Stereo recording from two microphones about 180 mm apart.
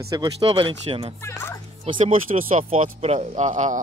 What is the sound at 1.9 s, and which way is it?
Speech, 35° right (ahead or behind).